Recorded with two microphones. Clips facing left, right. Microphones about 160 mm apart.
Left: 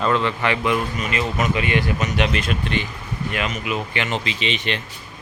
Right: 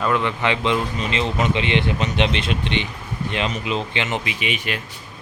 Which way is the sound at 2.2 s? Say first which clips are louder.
Even; 5° left (ahead or behind).